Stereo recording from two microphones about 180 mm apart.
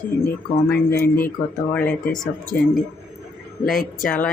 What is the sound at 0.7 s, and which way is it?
Speech, 15° left (ahead or behind).